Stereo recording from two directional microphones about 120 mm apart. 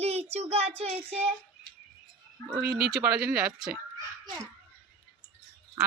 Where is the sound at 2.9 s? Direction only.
10° right (ahead or behind).